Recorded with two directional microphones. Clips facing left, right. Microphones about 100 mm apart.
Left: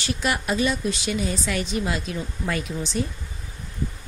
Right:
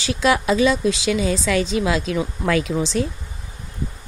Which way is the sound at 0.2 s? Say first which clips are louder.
Right 7 dB; 90° right.